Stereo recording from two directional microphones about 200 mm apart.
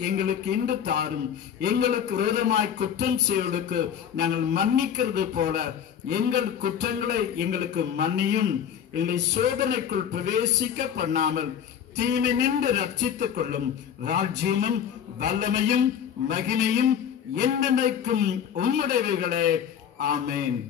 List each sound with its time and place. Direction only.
0.0 s a man's voice: 55° right (ahead or behind)
11.0 s a man's voice: 40° right (ahead or behind)
12.0 s a man's voice: 55° right (ahead or behind)